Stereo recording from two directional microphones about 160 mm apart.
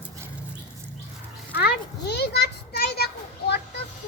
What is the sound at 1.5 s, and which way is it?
Children playing, 85° left.